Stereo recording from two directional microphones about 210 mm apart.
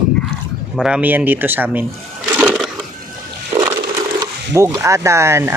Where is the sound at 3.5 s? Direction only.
15° right (ahead or behind).